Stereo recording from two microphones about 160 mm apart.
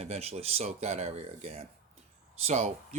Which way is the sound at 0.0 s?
40° right (ahead or behind).